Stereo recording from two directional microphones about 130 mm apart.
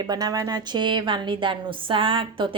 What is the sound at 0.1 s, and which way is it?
A woman's voice, 30° right (ahead or behind).